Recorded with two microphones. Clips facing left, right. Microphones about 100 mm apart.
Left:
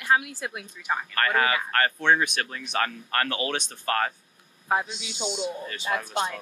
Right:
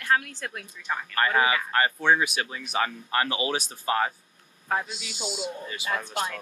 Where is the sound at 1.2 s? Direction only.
15° right (ahead or behind).